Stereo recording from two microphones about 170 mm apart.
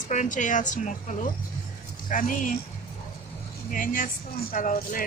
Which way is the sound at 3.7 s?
55° left (ahead or behind).